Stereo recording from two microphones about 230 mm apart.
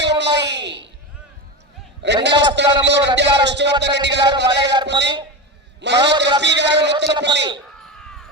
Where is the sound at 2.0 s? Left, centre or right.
Right.